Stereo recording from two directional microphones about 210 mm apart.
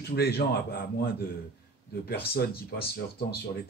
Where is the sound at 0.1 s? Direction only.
50° left (ahead or behind).